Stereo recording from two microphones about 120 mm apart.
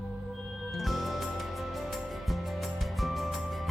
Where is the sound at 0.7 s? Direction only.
Centre (ahead or behind).